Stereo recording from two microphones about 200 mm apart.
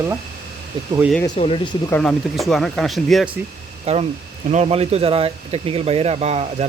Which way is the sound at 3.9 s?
30° right (ahead or behind).